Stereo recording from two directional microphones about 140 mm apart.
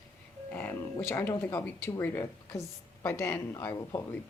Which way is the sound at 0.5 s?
15° left (ahead or behind).